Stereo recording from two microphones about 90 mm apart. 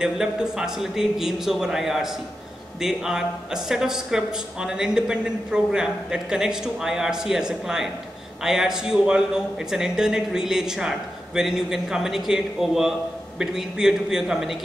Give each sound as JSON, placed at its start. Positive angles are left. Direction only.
{"t": 0.0, "sound": "a man's voice", "side_deg": -10}